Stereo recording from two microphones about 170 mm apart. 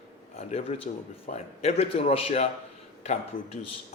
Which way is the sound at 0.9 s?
45° left (ahead or behind).